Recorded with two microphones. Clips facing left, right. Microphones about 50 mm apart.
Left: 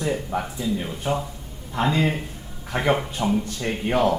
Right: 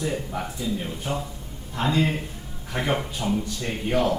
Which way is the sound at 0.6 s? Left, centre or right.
Centre.